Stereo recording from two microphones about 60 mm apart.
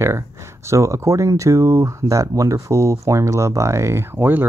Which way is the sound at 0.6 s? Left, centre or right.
Right.